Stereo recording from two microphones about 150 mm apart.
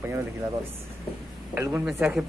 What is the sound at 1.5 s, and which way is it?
Speech, 10° right (ahead or behind).